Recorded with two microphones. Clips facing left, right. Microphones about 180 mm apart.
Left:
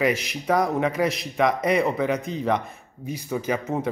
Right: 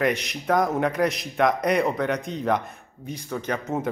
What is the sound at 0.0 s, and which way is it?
A man's voice, centre (ahead or behind).